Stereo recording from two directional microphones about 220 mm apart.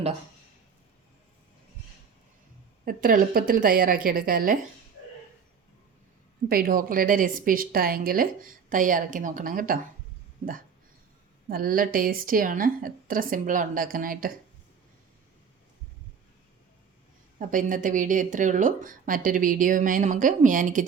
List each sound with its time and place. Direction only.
2.8 s speech: 40° right (ahead or behind)
6.5 s speech: 40° right (ahead or behind)
11.4 s speech: 40° right (ahead or behind)
17.5 s speech: 35° right (ahead or behind)